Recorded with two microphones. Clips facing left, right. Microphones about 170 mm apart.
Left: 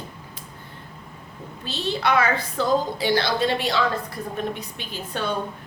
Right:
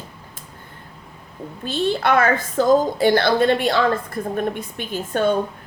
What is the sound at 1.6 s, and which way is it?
A woman's voice, 50° right (ahead or behind).